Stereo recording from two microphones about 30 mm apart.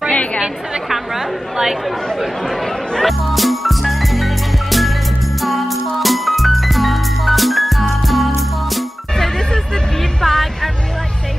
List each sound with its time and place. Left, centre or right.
0.1 s chatter: left
0.4 s a woman's voice: centre
3.0 s music: centre
10.2 s music: centre